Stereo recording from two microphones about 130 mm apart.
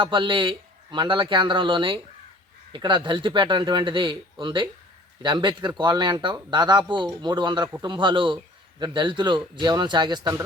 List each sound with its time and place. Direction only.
0.0 s speech: 40° right (ahead or behind)